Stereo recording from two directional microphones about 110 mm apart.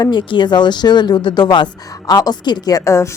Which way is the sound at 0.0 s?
45° left (ahead or behind).